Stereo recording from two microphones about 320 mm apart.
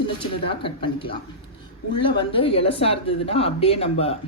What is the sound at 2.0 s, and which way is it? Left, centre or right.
A woman's voice, centre.